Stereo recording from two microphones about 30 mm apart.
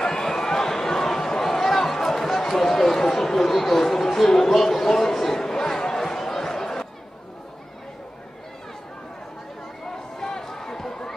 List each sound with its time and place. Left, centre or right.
0.0 s a sound: centre
2.3 s speech: centre
10.1 s run: centre